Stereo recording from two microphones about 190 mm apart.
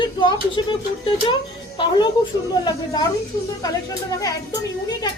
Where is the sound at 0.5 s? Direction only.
25° left (ahead or behind).